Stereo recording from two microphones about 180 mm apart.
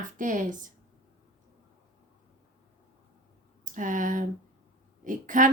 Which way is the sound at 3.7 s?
45° right (ahead or behind).